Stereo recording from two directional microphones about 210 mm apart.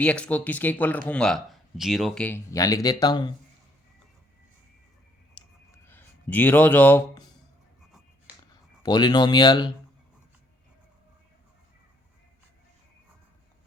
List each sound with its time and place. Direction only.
0.0 s speech: 5° left (ahead or behind)
5.3 s a sound: 10° left (ahead or behind)
8.8 s speech: 20° left (ahead or behind)